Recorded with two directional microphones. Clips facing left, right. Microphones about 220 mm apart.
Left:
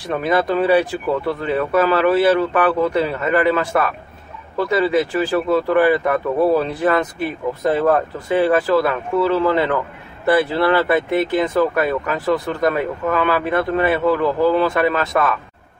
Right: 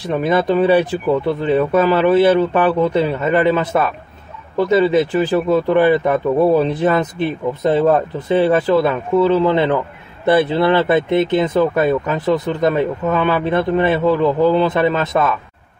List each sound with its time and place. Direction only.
0.1 s speech: 20° right (ahead or behind)